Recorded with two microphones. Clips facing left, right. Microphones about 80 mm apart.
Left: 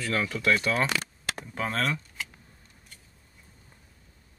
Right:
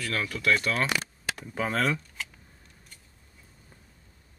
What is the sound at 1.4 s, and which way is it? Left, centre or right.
Speech, centre.